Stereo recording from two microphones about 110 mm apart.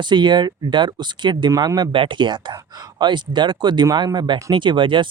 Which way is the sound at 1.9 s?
50° right (ahead or behind).